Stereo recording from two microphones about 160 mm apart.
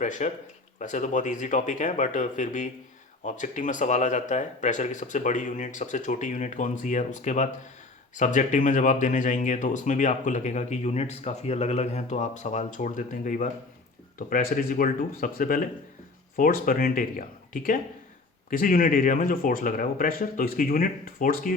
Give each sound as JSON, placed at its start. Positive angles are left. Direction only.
{"t": 0.0, "sound": "speech", "side_deg": 50}